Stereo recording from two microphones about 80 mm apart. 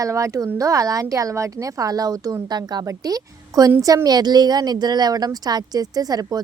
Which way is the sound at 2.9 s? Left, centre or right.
Right.